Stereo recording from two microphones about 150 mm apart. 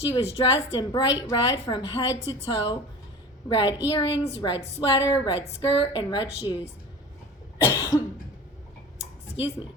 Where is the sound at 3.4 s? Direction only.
30° left (ahead or behind).